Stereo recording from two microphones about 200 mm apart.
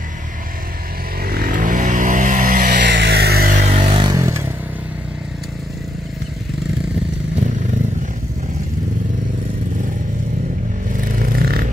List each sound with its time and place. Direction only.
1.2 s vehicle: 50° right (ahead or behind)
3.5 s vehicle: 25° right (ahead or behind)
11.1 s vehicle: 45° right (ahead or behind)